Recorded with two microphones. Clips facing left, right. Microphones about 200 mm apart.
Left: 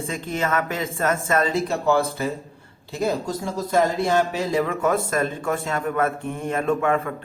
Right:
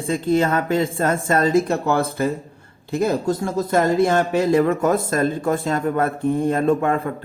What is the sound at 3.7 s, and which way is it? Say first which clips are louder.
Speech: right 3 dB; 55° right (ahead or behind).